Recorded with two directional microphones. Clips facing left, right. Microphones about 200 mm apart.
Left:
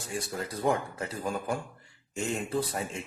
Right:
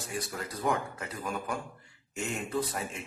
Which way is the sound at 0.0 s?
25° left (ahead or behind).